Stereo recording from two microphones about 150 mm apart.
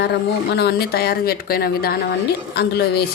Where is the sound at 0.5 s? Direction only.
90° left.